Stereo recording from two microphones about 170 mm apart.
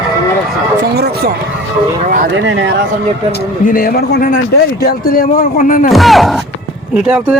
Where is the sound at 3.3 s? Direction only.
60° left (ahead or behind).